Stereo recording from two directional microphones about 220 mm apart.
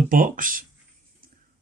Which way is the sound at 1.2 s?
40° right (ahead or behind).